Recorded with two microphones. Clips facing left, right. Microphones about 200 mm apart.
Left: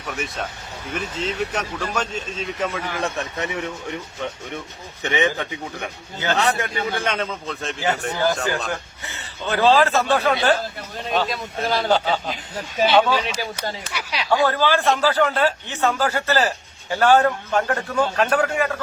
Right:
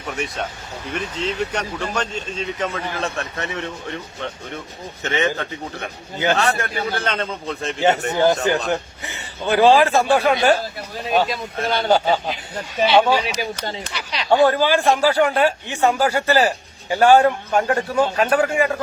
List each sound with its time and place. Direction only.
0.9 s a man's voice: 5° left (ahead or behind)
7.4 s a man's voice: centre (ahead or behind)
7.8 s speech: 25° right (ahead or behind); by 11.9 s centre (ahead or behind)
11.9 s speech: 10° right (ahead or behind)
13.9 s a man's voice: 10° left (ahead or behind)
14.3 s speech: 15° right (ahead or behind)